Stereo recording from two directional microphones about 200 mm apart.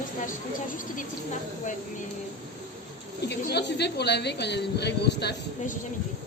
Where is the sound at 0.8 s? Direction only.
40° left (ahead or behind).